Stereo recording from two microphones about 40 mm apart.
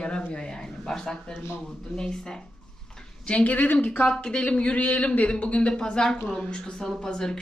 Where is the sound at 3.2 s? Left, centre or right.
Left.